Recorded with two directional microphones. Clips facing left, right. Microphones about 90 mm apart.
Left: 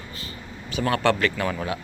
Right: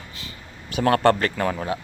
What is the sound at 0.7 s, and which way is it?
Speech, 50° right (ahead or behind).